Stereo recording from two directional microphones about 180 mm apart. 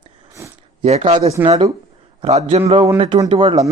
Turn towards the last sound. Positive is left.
turn(degrees=-25)  # may be behind; listen again after turning